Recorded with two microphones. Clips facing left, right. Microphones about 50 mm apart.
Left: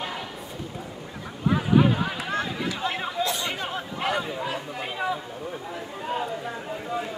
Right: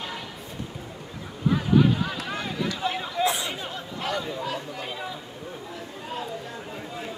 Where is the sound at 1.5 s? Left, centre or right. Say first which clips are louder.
Even; left.